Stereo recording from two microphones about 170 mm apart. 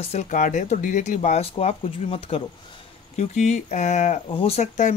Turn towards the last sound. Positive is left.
turn(degrees=45)  # may be behind; listen again after turning